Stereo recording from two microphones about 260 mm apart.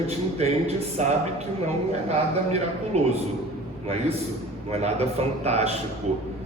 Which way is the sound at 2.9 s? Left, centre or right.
Right.